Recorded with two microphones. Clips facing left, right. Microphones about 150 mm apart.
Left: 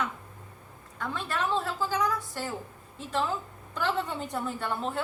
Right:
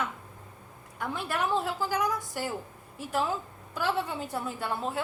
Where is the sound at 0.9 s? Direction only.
15° right (ahead or behind).